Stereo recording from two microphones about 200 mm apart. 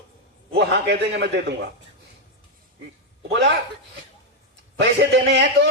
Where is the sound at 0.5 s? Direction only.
60° right (ahead or behind).